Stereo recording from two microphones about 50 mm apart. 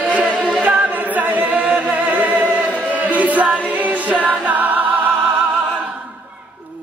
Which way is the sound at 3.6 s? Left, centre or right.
Right.